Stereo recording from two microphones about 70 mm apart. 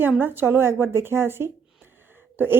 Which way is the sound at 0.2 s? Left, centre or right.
Right.